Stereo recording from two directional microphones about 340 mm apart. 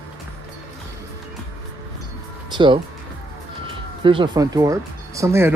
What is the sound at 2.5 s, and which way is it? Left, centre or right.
Speech, centre.